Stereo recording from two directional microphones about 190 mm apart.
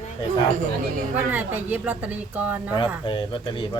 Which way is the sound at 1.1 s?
10° right (ahead or behind).